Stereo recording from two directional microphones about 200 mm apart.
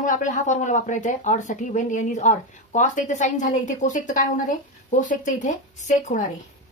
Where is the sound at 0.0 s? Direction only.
40° left (ahead or behind).